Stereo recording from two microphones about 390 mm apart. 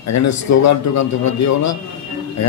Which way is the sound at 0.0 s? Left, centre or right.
Left.